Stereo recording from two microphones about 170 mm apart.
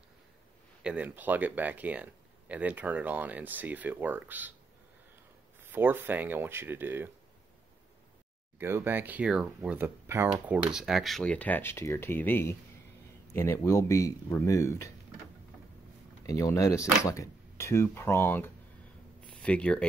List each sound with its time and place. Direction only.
0.8 s speech: 10° right (ahead or behind)
5.6 s speech: 10° right (ahead or behind)
8.5 s speech: 15° right (ahead or behind); by 14.9 s 15° left (ahead or behind)
16.3 s speech: 20° left (ahead or behind)